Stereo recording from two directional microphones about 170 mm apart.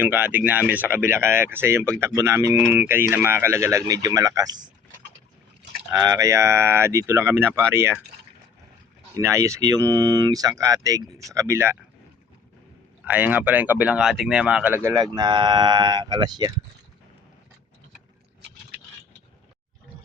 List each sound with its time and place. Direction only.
0.0 s speech: 10° right (ahead or behind)
5.9 s speech: 20° right (ahead or behind)
9.1 s speech: 20° right (ahead or behind)
13.1 s speech: 10° right (ahead or behind)